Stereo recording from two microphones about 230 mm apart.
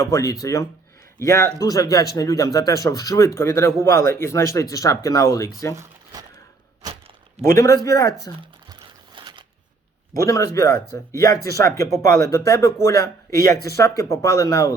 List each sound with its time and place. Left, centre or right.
0.0 s speech: centre
7.4 s speech: centre
8.7 s a sound: centre
10.2 s speech: centre